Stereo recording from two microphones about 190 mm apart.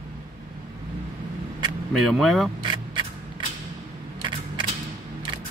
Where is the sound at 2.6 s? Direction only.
25° right (ahead or behind).